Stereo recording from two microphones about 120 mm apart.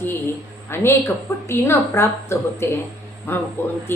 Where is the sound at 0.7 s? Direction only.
20° left (ahead or behind).